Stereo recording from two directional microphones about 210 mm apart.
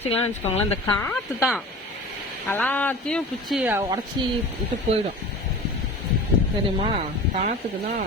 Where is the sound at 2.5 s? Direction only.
10° left (ahead or behind).